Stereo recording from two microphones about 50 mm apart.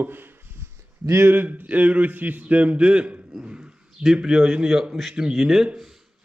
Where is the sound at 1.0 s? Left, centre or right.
Right.